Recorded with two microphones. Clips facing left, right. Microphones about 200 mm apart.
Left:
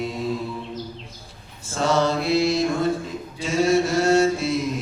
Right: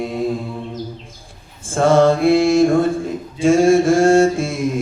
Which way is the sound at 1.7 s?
50° right (ahead or behind).